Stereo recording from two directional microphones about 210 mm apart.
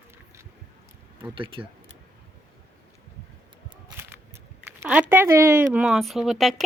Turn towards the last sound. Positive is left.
turn(degrees=0)  # may be behind; listen again after turning